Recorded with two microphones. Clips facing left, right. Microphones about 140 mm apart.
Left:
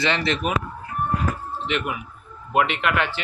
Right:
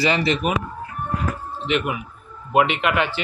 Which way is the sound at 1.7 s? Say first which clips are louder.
Right 5 dB; 10° right (ahead or behind).